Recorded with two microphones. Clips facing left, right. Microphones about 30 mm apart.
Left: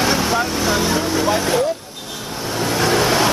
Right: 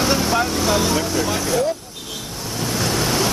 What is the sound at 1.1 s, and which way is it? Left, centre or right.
Speech, left.